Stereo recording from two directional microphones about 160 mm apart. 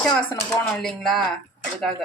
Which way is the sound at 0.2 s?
5° left (ahead or behind).